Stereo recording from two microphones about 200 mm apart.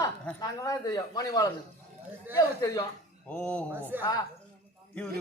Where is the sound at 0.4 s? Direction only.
20° left (ahead or behind).